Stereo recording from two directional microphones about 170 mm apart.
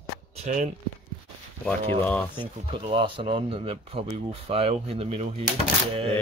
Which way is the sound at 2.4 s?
30° right (ahead or behind).